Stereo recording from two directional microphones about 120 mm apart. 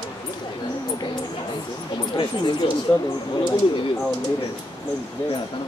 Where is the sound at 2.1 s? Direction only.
40° left (ahead or behind).